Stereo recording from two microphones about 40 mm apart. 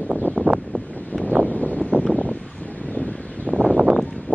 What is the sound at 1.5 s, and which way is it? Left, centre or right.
Wind noise, left.